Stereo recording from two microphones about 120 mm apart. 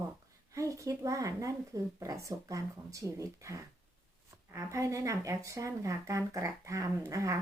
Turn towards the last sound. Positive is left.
turn(degrees=-25)  # may be behind; listen again after turning